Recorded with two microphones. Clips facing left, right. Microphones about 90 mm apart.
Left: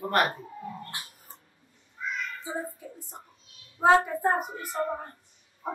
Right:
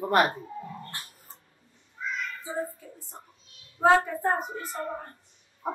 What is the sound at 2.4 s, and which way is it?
A child's voice, 15° left (ahead or behind).